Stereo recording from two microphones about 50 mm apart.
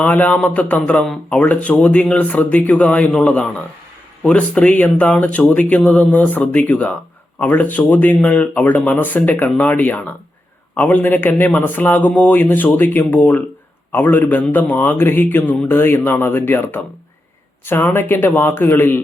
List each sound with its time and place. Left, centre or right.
0.0 s a man's voice: left